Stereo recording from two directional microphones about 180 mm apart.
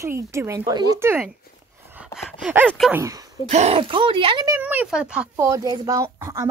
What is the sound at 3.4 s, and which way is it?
Speech, 35° right (ahead or behind).